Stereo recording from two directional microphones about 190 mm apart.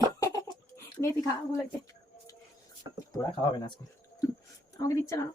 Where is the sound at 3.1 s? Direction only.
20° left (ahead or behind).